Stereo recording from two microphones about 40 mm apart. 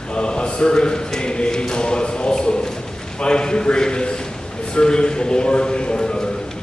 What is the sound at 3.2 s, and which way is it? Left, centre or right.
A man's voice, left.